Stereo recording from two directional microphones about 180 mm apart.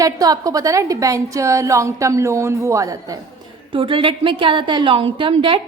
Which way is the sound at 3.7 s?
30° right (ahead or behind).